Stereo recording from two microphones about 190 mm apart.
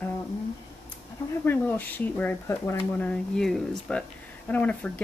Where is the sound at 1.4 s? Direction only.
10° left (ahead or behind).